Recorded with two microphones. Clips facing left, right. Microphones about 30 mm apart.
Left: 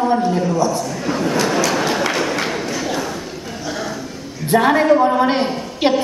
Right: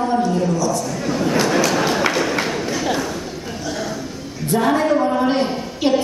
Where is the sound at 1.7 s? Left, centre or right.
Centre.